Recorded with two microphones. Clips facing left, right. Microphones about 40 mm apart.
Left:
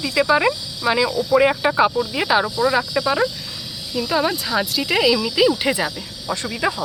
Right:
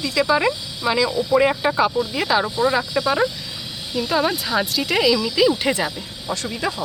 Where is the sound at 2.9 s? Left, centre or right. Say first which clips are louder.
Even; centre.